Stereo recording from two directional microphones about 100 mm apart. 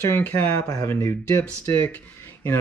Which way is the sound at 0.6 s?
40° left (ahead or behind).